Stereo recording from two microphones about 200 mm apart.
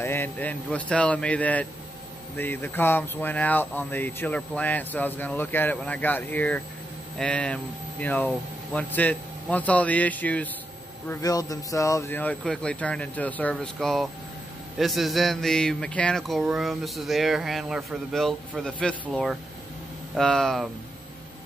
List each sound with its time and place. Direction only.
0.0 s speech: 10° left (ahead or behind)